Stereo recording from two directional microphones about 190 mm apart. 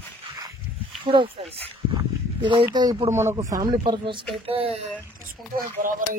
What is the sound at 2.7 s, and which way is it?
Speech, 20° right (ahead or behind).